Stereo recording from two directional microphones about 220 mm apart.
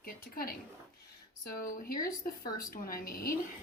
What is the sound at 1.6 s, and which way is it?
A woman's voice, 40° left (ahead or behind).